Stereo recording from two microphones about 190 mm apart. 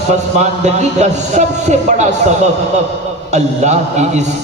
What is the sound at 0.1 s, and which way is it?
A man's voice, 35° right (ahead or behind).